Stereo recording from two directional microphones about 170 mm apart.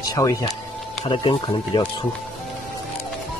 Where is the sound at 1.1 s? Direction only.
30° left (ahead or behind).